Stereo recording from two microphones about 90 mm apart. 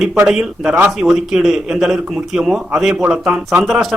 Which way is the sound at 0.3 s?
5° right (ahead or behind).